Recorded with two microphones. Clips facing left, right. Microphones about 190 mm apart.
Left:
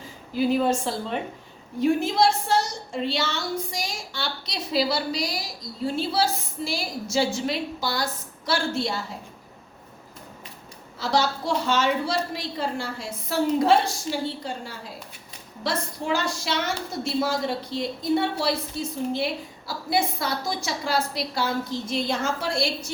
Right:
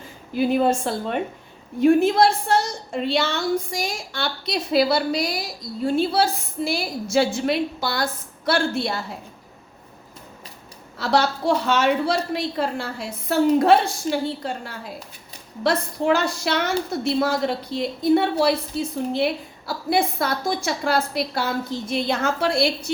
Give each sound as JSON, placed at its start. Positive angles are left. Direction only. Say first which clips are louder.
{"t": 0.3, "sound": "a woman's voice", "louder": "right 2 dB", "side_deg": -55}
{"t": 11.0, "sound": "a woman's voice", "louder": "right 4 dB", "side_deg": -60}